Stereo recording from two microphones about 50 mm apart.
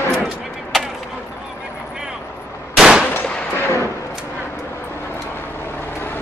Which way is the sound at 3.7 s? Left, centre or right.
Left.